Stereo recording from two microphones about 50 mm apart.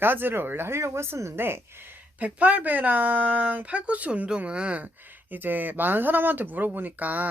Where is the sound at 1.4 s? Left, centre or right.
Right.